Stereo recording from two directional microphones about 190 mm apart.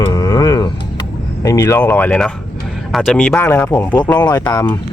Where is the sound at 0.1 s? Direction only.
15° left (ahead or behind).